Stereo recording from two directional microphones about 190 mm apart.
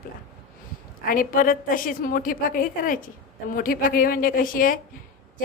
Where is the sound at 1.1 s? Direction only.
45° left (ahead or behind).